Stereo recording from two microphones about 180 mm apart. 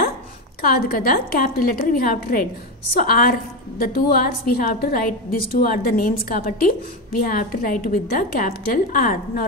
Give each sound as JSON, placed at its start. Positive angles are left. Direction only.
{"t": 0.6, "sound": "a woman's voice", "side_deg": 55}